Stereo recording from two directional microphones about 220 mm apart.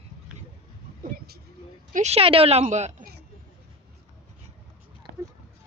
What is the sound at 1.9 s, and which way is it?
A woman's voice, 30° right (ahead or behind).